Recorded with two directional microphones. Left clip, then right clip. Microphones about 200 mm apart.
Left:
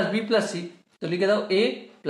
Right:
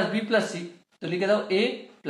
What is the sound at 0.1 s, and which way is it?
Speech, 25° left (ahead or behind).